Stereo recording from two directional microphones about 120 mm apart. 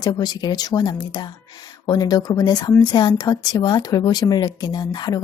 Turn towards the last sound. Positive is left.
turn(degrees=35)  # may be behind; listen again after turning